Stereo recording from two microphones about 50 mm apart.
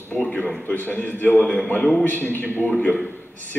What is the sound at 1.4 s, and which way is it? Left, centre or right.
Speech, centre.